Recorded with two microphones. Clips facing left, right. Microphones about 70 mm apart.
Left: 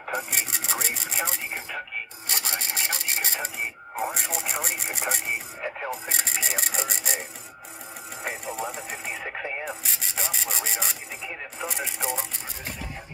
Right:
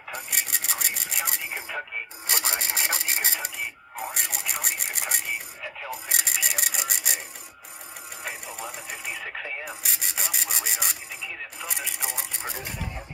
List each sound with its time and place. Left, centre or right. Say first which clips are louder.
0.5 s rub: left 2 dB; centre
2.5 s speech: right 2 dB; centre
8.3 s speech: left 5 dB; centre
9.2 s radio: left 2 dB; left
9.7 s speech: left 1 dB; centre